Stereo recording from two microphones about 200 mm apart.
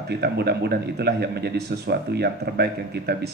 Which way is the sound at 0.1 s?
55° right (ahead or behind).